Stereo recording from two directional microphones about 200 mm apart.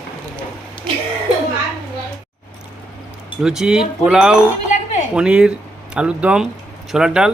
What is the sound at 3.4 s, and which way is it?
Speech, 5° right (ahead or behind).